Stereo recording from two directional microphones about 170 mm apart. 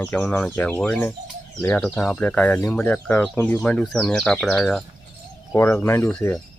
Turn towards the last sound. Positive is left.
turn(degrees=10)  # may be behind; listen again after turning